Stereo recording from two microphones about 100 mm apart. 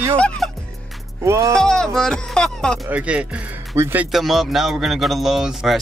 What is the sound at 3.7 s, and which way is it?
Speech, 30° right (ahead or behind).